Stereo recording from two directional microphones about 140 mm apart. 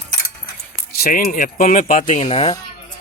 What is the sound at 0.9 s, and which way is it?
Speech, 90° left.